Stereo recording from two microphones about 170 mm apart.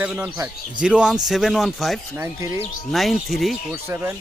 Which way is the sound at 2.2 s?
15° right (ahead or behind).